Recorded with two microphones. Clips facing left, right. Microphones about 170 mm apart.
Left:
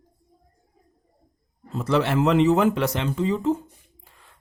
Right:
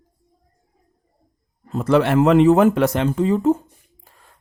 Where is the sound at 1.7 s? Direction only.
55° right (ahead or behind).